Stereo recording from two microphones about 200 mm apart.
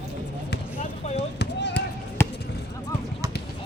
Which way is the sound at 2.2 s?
10° left (ahead or behind).